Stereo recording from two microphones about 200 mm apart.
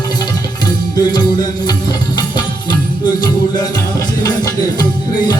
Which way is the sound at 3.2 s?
20° left (ahead or behind).